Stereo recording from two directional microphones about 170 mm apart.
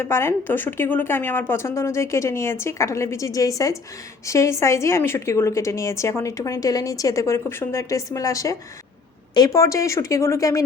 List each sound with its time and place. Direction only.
0.0 s a woman's voice: 15° left (ahead or behind)